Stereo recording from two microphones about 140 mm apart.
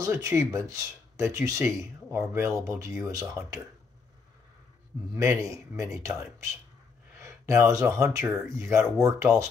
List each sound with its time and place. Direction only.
0.0 s speech: 20° right (ahead or behind)
5.1 s speech: 20° right (ahead or behind)
7.2 s speech: 20° right (ahead or behind)